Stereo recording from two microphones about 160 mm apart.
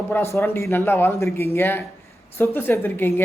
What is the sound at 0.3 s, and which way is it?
Speech, 15° left (ahead or behind).